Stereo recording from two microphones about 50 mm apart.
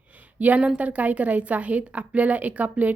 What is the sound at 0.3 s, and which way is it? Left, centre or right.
A woman's voice, right.